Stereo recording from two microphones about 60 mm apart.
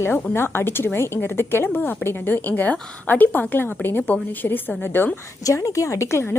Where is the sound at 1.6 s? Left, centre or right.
Left.